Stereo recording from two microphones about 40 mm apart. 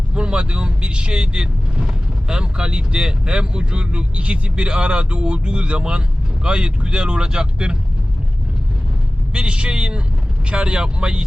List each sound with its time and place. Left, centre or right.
0.1 s speech: right
9.3 s speech: right